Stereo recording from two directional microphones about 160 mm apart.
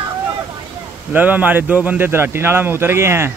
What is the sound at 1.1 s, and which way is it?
A man's voice, 10° right (ahead or behind).